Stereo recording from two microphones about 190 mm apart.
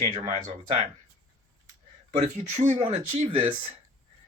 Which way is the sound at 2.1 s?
40° right (ahead or behind).